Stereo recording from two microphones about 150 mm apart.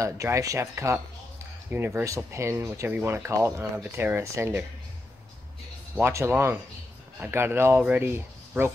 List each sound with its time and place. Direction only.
0.0 s speech: 20° right (ahead or behind)
5.9 s speech: 15° right (ahead or behind)